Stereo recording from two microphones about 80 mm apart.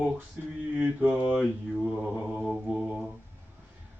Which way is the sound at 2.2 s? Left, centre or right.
Centre.